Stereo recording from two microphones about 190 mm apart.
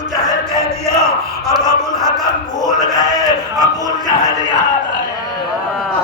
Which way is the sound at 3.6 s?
20° right (ahead or behind).